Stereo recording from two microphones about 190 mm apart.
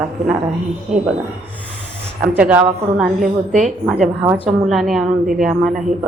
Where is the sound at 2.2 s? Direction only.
10° right (ahead or behind).